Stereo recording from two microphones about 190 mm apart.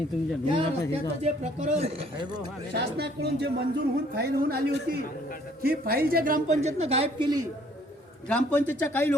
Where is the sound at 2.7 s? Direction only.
60° right (ahead or behind); by 7.4 s 25° right (ahead or behind).